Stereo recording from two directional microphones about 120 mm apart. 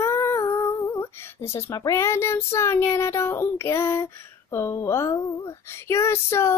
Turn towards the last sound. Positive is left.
turn(degrees=20)  # may be behind; listen again after turning